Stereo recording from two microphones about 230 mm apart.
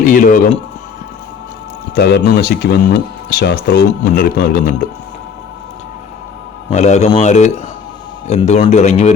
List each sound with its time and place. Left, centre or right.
0.0 s speech: left
2.0 s speech: left
6.7 s a man's voice: left